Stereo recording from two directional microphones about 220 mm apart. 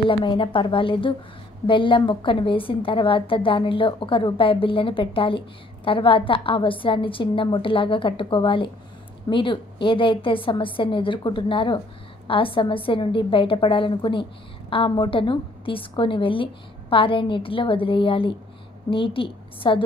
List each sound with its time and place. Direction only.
0.1 s a woman's voice: 25° left (ahead or behind)